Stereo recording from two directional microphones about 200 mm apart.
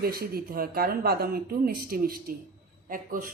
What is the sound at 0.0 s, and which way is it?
Speech, 50° right (ahead or behind).